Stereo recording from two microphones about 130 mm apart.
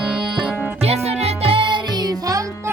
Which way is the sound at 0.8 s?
55° right (ahead or behind).